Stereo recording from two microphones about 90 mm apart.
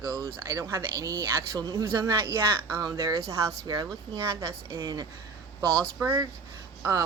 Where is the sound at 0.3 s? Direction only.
35° right (ahead or behind).